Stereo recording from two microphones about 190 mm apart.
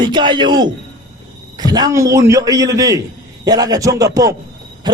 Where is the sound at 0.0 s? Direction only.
25° right (ahead or behind).